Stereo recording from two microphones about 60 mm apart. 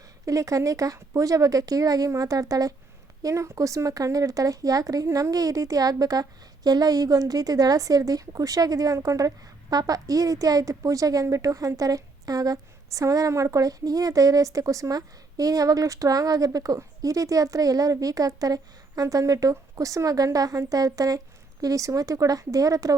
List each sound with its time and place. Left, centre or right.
0.3 s a woman's voice: right
3.2 s a woman's voice: right
21.6 s speech: right